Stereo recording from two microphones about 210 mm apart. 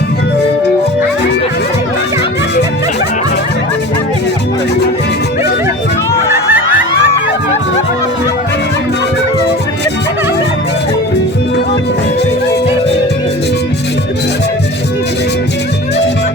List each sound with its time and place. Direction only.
6.3 s music: 10° right (ahead or behind)